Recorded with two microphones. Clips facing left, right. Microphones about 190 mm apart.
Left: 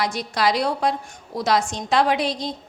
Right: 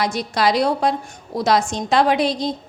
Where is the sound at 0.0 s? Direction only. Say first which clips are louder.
Right 3 dB; 25° right (ahead or behind).